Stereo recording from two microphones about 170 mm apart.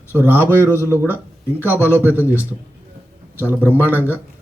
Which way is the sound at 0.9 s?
15° left (ahead or behind).